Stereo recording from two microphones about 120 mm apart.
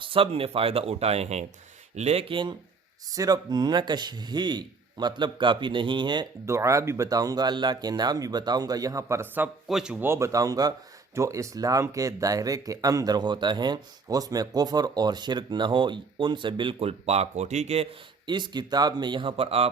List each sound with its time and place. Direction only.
0.0 s speech: 50° right (ahead or behind)
3.2 s speech: 30° right (ahead or behind)
6.4 s speech: 25° right (ahead or behind)
9.6 s a man's voice: 5° right (ahead or behind)
10.0 s speech: 25° right (ahead or behind); by 16.9 s 45° right (ahead or behind)
17.1 s speech: 65° right (ahead or behind)
18.3 s speech: 40° right (ahead or behind); by 19.7 s 55° right (ahead or behind)